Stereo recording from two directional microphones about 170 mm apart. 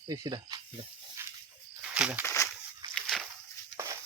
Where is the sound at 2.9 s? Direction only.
Centre (ahead or behind).